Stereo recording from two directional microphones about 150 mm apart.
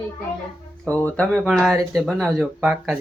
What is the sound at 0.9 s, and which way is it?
Speech, 10° left (ahead or behind).